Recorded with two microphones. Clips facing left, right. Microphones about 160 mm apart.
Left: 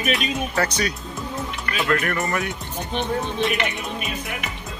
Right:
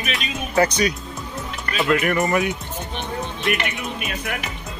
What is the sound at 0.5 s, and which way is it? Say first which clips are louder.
Speech: right 8 dB; 20° right (ahead or behind).